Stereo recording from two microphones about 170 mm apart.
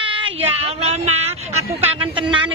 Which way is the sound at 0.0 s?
30° right (ahead or behind).